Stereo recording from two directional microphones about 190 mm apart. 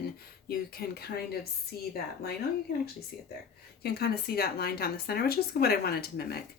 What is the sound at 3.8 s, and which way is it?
A woman's voice, 55° left (ahead or behind).